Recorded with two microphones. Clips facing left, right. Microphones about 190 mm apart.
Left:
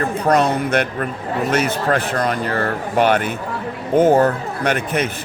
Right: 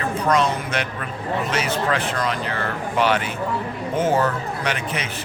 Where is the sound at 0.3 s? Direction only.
60° left (ahead or behind).